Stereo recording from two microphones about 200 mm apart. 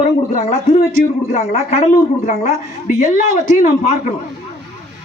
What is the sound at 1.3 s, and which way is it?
A woman's voice, 40° left (ahead or behind).